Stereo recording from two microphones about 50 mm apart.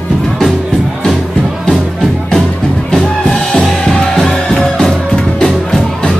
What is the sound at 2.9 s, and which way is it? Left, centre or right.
Music, centre.